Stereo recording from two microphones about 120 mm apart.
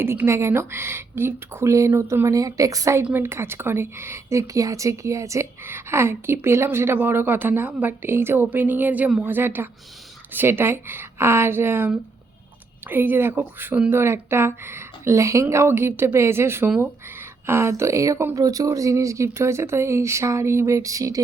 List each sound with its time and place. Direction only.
0.0 s a woman's voice: 20° right (ahead or behind)
3.0 s a woman's voice: 15° right (ahead or behind)